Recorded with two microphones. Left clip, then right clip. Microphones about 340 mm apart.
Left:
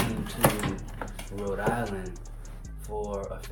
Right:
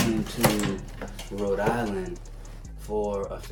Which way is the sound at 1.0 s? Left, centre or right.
Centre.